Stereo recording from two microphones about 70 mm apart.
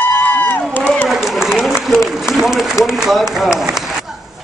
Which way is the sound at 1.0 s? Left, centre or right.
Centre.